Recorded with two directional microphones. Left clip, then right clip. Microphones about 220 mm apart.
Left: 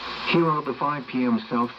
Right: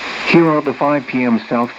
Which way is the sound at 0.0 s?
45° right (ahead or behind).